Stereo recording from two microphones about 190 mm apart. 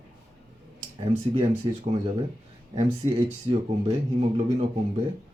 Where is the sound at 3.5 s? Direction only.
30° right (ahead or behind).